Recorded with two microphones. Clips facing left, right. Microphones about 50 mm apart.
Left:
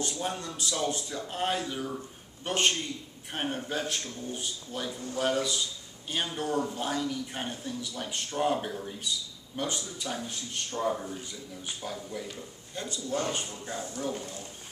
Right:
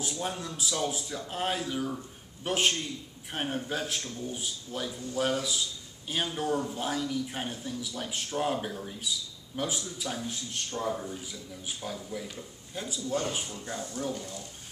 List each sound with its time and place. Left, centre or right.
0.0 s speech: centre
14.1 s speech: left